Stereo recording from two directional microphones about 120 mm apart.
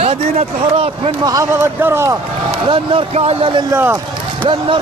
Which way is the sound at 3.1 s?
60° right (ahead or behind).